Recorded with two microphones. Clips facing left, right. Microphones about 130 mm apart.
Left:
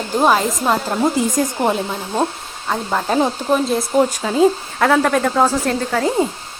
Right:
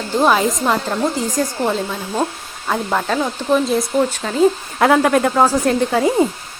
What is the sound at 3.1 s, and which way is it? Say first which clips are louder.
Speech: left 7 dB; 30° left (ahead or behind).